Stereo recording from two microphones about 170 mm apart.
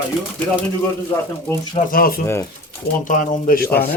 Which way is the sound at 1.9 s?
60° left (ahead or behind).